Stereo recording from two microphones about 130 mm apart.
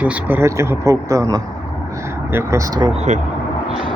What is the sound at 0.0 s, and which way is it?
Speech, 10° right (ahead or behind).